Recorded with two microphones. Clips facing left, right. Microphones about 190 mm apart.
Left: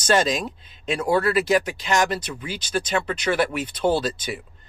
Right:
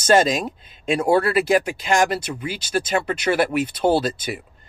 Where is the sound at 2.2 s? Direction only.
10° right (ahead or behind).